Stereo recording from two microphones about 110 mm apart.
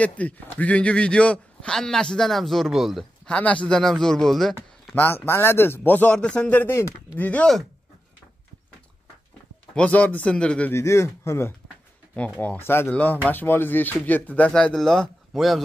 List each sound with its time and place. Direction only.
0.0 s a man's voice: 10° left (ahead or behind)
3.3 s speech: 10° left (ahead or behind)
4.9 s a man's voice: 20° left (ahead or behind)
7.2 s a man's voice: 10° left (ahead or behind)
9.8 s a man's voice: 15° left (ahead or behind)
10.7 s a man's voice: 25° left (ahead or behind); by 15.6 s centre (ahead or behind)